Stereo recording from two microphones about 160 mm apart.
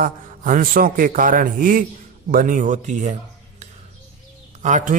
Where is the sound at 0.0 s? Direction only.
60° right (ahead or behind).